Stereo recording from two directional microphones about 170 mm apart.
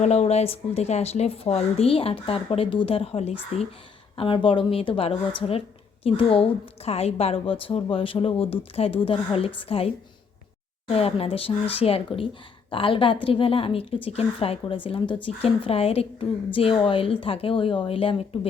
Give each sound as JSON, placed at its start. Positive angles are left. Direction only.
{"t": 0.0, "sound": "a woman's voice", "side_deg": 40}